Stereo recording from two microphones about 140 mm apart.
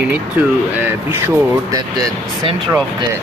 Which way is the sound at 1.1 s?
20° right (ahead or behind).